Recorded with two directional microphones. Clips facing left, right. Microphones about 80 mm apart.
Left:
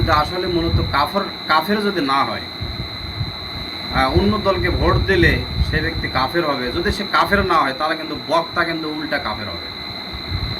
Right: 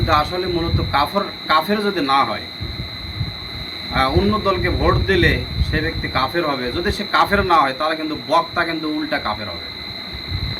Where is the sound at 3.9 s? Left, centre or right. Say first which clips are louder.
Even; centre.